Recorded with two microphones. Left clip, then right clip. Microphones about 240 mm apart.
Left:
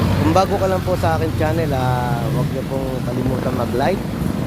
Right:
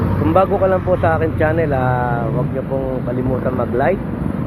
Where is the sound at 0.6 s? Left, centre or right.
Left.